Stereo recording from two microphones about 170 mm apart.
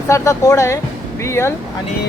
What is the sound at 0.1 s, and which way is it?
Speech, 15° left (ahead or behind).